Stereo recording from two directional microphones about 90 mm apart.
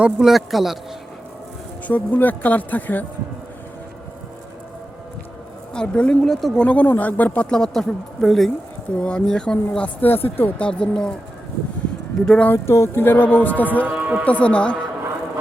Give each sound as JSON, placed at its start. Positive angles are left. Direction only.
{"t": 0.0, "sound": "a woman's voice", "side_deg": -5}
{"t": 1.9, "sound": "speech", "side_deg": 20}
{"t": 5.7, "sound": "speech", "side_deg": 10}
{"t": 6.6, "sound": "speech", "side_deg": 15}
{"t": 7.5, "sound": "a woman's voice", "side_deg": 5}
{"t": 10.7, "sound": "speech", "side_deg": 10}
{"t": 12.2, "sound": "speech", "side_deg": 10}
{"t": 12.5, "sound": "speech", "side_deg": 30}
{"t": 13.8, "sound": "speech", "side_deg": -20}
{"t": 14.3, "sound": "speech", "side_deg": 15}